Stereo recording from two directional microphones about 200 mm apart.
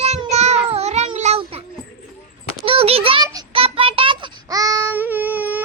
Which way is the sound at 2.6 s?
25° right (ahead or behind).